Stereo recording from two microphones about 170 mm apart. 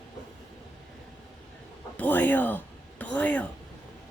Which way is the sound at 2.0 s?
10° left (ahead or behind).